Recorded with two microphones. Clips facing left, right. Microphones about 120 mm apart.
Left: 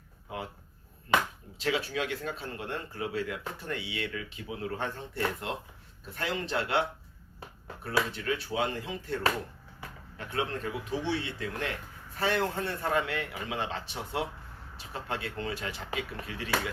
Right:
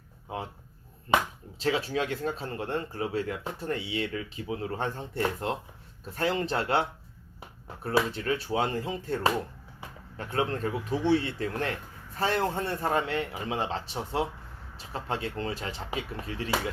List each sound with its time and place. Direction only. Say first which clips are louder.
1.5 s speech: right 3 dB; 35° right (ahead or behind)
7.9 s speech: right 3 dB; 35° right (ahead or behind)